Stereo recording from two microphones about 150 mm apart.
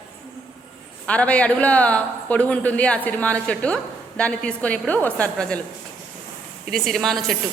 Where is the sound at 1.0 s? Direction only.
10° left (ahead or behind).